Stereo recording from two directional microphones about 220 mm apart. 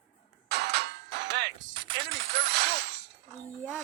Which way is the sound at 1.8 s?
55° right (ahead or behind).